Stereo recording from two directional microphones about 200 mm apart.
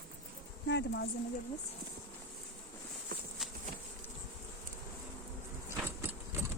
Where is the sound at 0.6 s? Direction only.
60° left (ahead or behind).